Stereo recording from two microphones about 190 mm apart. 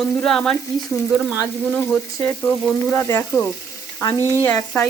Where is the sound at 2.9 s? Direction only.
10° left (ahead or behind).